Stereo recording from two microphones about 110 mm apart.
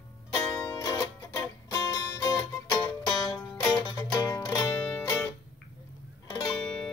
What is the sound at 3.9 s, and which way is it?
Music, 30° left (ahead or behind).